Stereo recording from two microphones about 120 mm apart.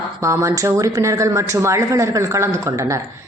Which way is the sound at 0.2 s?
25° right (ahead or behind).